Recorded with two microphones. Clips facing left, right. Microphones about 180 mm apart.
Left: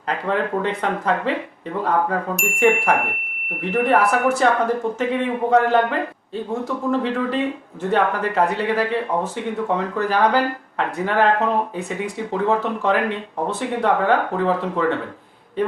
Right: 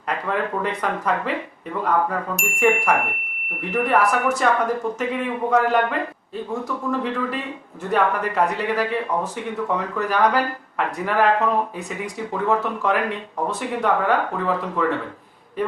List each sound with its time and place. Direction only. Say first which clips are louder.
0.1 s speech: left 2 dB; 30° left (ahead or behind)
2.3 s speech: left 3 dB; centre (ahead or behind)
3.6 s speech: left 2 dB; 30° left (ahead or behind)